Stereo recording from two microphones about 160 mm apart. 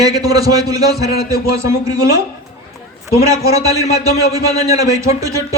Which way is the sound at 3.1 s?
20° right (ahead or behind).